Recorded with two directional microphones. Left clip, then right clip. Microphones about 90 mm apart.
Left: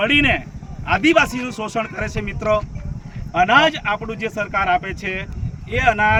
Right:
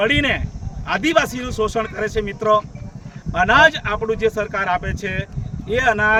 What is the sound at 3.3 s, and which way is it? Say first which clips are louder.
Speech: right 1 dB; 40° right (ahead or behind).